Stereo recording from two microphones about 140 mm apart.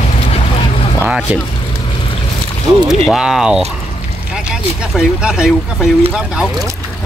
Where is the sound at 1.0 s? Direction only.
10° right (ahead or behind).